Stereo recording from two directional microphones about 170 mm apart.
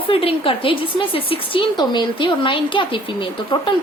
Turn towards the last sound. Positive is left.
turn(degrees=30)  # may be behind; listen again after turning